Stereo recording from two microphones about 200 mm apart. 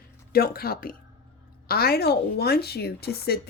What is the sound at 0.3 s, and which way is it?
Speech, 50° left (ahead or behind).